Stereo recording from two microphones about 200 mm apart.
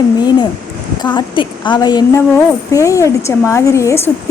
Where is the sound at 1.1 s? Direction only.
25° left (ahead or behind).